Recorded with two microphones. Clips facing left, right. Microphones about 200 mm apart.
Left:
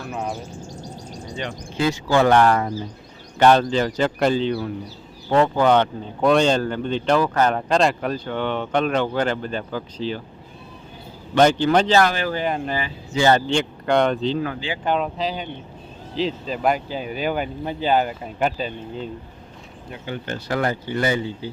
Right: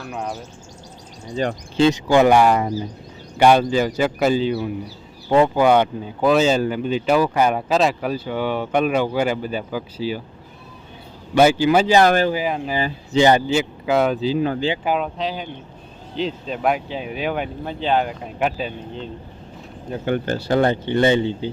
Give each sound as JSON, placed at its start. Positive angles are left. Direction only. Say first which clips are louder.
{"t": 0.1, "sound": "speech", "louder": "even", "side_deg": 0}
{"t": 1.7, "sound": "speech", "louder": "right 6 dB", "side_deg": -25}
{"t": 2.0, "sound": "speech", "louder": "even", "side_deg": -15}
{"t": 11.3, "sound": "speech", "louder": "right 2 dB", "side_deg": -10}
{"t": 12.0, "sound": "speech", "louder": "right 7 dB", "side_deg": -40}
{"t": 12.3, "sound": "speech", "louder": "right 1 dB", "side_deg": -5}
{"t": 13.1, "sound": "speech", "louder": "right 3 dB", "side_deg": -15}
{"t": 13.5, "sound": "speech", "louder": "right 1 dB", "side_deg": -5}
{"t": 20.2, "sound": "speech", "louder": "right 4 dB", "side_deg": -35}